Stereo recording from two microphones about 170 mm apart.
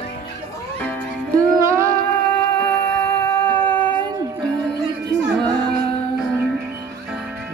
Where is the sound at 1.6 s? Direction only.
15° right (ahead or behind).